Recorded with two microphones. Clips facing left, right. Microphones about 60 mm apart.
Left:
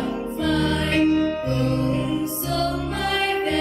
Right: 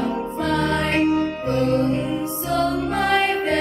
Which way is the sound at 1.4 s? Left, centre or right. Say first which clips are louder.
Right 3 dB; right.